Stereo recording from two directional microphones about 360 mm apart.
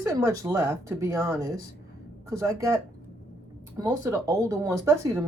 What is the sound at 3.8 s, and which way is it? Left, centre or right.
Speech, centre.